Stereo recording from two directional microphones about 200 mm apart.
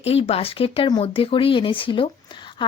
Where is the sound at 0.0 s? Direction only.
30° left (ahead or behind).